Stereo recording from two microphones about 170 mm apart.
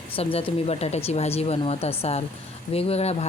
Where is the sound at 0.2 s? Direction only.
35° left (ahead or behind).